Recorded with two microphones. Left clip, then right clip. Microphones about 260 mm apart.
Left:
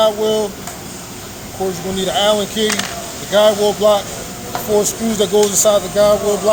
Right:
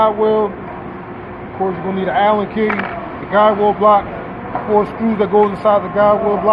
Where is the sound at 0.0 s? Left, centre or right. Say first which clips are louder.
Right 1 dB; left.